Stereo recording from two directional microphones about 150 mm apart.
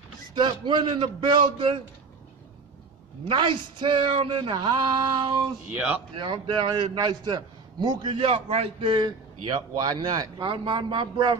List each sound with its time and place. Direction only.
0.3 s a man's voice: 30° right (ahead or behind)
3.3 s a man's voice: 35° right (ahead or behind)
8.9 s a man's voice: 30° right (ahead or behind)